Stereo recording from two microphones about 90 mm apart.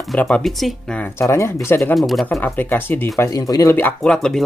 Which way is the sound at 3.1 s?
35° left (ahead or behind).